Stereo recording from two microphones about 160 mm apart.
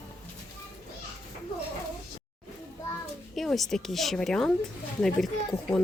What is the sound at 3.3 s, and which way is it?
Speech, centre (ahead or behind).